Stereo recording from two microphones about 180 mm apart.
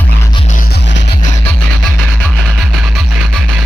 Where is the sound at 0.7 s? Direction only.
75° left (ahead or behind).